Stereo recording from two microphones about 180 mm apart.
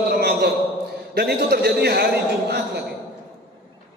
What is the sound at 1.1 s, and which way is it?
A man's voice, 60° right (ahead or behind).